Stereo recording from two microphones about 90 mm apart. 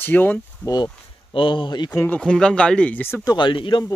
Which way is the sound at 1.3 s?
70° left (ahead or behind).